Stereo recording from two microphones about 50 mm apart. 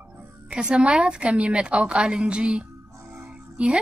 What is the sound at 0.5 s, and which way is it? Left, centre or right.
Speech, centre.